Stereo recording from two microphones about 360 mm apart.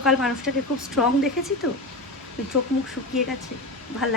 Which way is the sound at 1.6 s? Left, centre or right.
Left.